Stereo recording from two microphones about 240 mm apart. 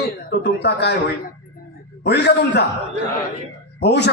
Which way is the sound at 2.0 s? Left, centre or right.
Left.